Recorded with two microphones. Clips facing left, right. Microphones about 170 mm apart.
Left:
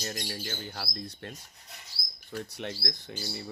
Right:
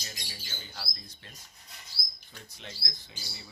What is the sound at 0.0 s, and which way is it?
Speech, 55° left (ahead or behind).